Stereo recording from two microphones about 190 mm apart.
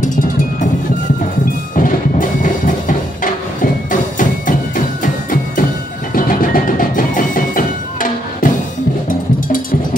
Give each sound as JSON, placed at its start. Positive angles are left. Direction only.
{"t": 1.8, "sound": "music", "side_deg": 45}